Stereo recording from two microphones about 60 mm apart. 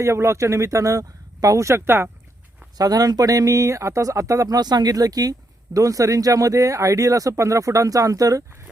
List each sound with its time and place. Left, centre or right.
0.0 s speech: right
2.7 s speech: right
5.7 s speech: right